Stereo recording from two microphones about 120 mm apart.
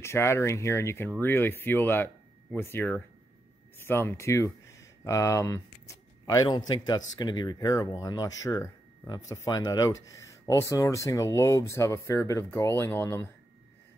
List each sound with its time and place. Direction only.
0.0 s speech: 20° left (ahead or behind)